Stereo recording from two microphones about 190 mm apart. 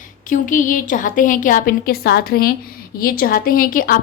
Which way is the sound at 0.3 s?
45° left (ahead or behind).